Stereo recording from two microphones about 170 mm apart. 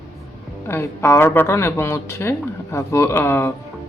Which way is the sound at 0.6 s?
15° left (ahead or behind).